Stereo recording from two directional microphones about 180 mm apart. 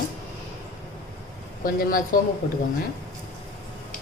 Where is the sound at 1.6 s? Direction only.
50° left (ahead or behind).